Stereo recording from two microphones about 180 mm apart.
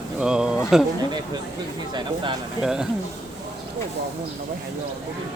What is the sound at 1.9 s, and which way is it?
Speech, 25° right (ahead or behind).